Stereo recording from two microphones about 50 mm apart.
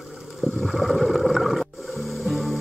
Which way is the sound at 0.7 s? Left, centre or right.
Centre.